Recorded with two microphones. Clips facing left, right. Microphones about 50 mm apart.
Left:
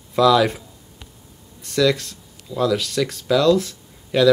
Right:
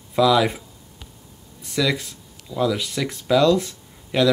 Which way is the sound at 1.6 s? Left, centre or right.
Centre.